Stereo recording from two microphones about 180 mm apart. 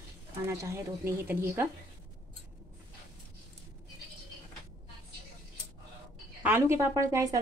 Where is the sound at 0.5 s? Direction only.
15° right (ahead or behind).